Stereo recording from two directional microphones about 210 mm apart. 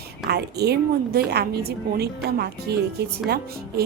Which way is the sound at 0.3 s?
50° right (ahead or behind).